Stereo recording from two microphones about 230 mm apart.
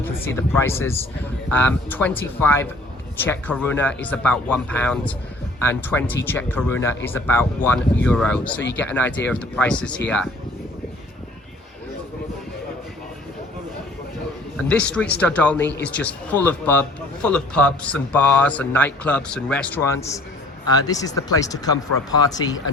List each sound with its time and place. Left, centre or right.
0.0 s a man's voice: centre
14.7 s a man's voice: centre